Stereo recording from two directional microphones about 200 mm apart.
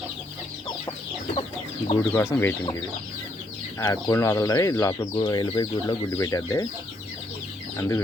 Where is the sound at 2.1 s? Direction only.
10° left (ahead or behind).